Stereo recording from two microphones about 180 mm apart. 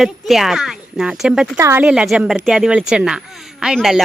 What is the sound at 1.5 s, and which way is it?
Speech, 15° right (ahead or behind).